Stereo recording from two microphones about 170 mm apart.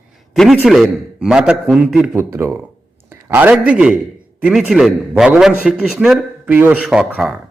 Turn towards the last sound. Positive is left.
turn(degrees=-5)  # may be behind; listen again after turning